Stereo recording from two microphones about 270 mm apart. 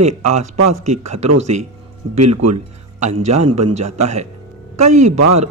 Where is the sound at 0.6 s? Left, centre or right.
Right.